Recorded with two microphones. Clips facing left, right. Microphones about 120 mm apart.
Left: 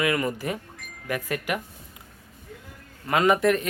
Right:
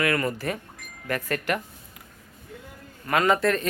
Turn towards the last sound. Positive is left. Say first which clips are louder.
# left 1 dB
turn(degrees=15)  # may be behind; listen again after turning